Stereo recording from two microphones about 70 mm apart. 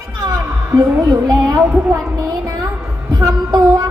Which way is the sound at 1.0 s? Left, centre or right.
Right.